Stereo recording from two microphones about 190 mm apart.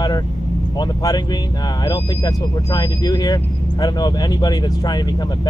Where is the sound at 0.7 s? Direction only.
20° left (ahead or behind).